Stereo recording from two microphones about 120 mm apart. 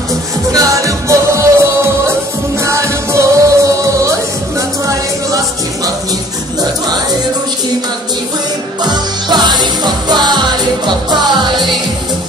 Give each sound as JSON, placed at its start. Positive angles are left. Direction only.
{"t": 0.5, "sound": "music", "side_deg": -30}
{"t": 8.8, "sound": "music", "side_deg": -35}